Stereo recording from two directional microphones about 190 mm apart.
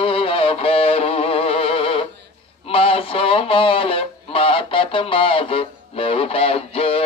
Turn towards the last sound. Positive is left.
turn(degrees=30)  # may be behind; listen again after turning